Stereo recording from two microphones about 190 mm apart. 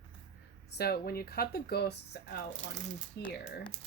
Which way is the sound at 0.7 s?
55° left (ahead or behind).